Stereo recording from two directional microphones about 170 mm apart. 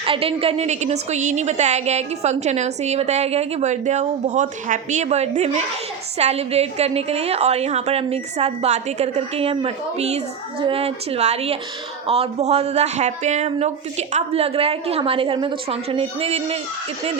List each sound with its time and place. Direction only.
0.0 s a woman's voice: 35° right (ahead or behind)